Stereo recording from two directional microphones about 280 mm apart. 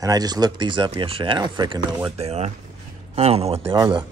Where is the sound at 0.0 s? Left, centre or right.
Centre.